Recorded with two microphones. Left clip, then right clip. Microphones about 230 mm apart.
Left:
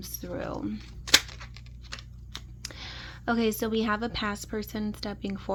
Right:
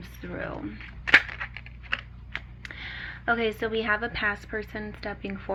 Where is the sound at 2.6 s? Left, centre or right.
Left.